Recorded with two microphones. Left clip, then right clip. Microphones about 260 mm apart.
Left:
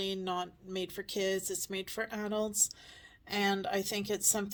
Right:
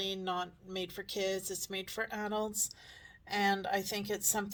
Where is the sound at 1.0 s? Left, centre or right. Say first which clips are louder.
Left 2 dB; left.